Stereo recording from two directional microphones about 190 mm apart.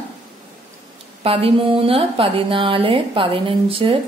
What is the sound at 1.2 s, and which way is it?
A woman's voice, 30° right (ahead or behind).